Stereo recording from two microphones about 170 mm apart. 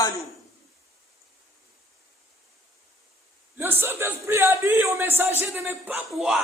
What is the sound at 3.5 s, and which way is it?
A man's voice, 15° right (ahead or behind).